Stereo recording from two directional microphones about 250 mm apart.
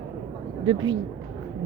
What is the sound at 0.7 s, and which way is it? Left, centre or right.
Speech, centre.